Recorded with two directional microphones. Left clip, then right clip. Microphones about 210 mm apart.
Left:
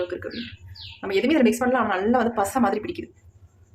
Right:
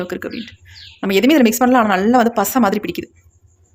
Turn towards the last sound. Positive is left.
turn(degrees=-45)  # may be behind; listen again after turning